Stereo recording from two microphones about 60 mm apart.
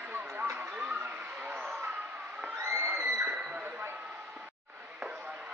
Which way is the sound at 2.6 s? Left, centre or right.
Right.